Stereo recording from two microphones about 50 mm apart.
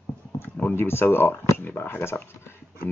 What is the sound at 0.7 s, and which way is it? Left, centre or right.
Speech, left.